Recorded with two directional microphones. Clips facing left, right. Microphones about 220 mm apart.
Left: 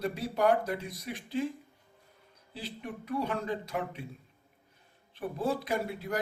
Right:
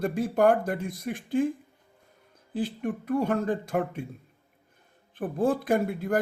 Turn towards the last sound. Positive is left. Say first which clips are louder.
# right 7 dB
turn(degrees=-50)  # may be behind; listen again after turning